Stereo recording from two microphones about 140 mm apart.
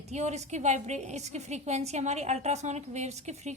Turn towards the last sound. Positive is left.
turn(degrees=-55)  # may be behind; listen again after turning